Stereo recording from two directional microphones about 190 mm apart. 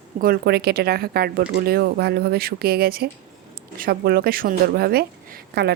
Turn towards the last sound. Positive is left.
turn(degrees=-55)  # may be behind; listen again after turning